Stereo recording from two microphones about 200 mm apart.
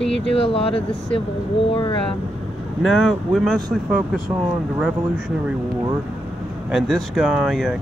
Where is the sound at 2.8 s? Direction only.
Centre (ahead or behind).